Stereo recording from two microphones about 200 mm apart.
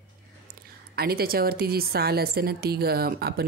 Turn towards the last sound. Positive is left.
turn(degrees=-50)  # may be behind; listen again after turning